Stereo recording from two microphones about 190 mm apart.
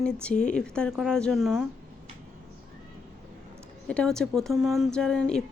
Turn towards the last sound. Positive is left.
turn(degrees=5)  # may be behind; listen again after turning